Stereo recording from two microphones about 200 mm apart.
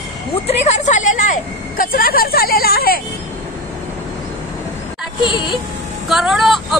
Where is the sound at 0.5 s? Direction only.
35° left (ahead or behind).